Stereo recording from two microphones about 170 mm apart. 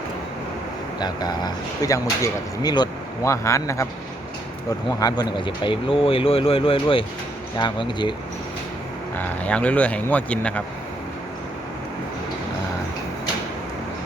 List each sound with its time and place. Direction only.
0.9 s speech: 25° left (ahead or behind)
4.9 s speech: 20° left (ahead or behind)
9.1 s speech: 10° left (ahead or behind)